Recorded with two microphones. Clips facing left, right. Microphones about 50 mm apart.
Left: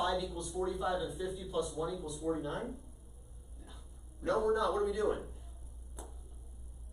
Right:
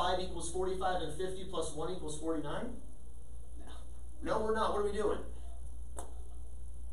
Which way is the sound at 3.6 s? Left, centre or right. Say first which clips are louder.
Right 2 dB; centre.